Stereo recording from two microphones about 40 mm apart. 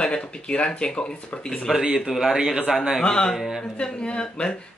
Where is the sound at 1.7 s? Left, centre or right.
Centre.